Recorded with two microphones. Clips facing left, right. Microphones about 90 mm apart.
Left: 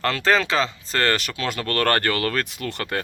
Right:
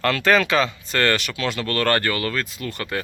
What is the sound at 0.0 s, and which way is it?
Speech, 30° left (ahead or behind).